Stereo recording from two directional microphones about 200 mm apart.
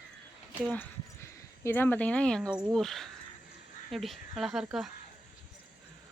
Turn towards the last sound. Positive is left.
turn(degrees=-5)  # may be behind; listen again after turning